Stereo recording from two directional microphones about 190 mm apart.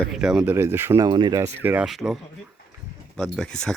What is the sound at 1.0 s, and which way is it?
Speech, 25° right (ahead or behind).